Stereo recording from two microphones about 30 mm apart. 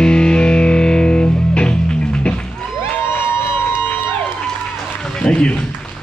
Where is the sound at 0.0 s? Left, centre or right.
Left.